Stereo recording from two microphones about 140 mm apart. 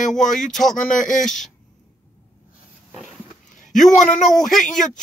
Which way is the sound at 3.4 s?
65° left (ahead or behind).